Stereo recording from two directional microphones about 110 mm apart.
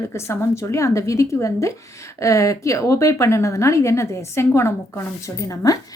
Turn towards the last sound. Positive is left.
turn(degrees=30)  # may be behind; listen again after turning